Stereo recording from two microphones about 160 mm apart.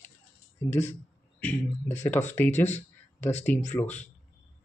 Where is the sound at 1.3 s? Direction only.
10° left (ahead or behind).